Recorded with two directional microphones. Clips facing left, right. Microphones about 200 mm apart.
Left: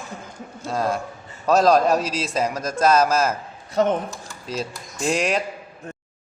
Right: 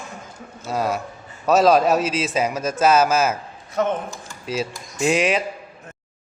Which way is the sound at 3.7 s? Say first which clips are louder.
Left 2 dB; 35° left (ahead or behind).